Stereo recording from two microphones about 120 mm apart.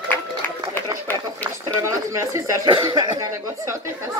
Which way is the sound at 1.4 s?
25° right (ahead or behind).